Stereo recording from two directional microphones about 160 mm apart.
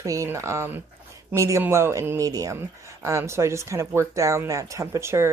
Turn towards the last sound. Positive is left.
turn(degrees=-15)  # may be behind; listen again after turning